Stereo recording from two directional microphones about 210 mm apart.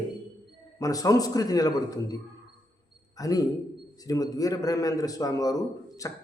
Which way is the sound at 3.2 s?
15° left (ahead or behind).